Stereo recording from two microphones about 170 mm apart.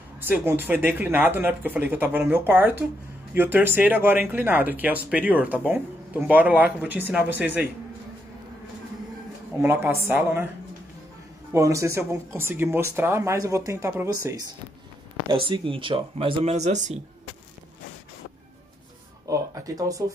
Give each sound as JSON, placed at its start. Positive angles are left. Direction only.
{"t": 0.3, "sound": "speech", "side_deg": -10}
{"t": 9.6, "sound": "speech", "side_deg": -15}
{"t": 11.5, "sound": "speech", "side_deg": -20}
{"t": 15.2, "sound": "speech", "side_deg": -30}
{"t": 19.2, "sound": "speech", "side_deg": -20}